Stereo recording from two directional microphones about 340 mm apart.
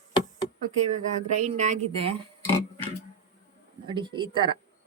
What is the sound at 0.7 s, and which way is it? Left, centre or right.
Speech, right.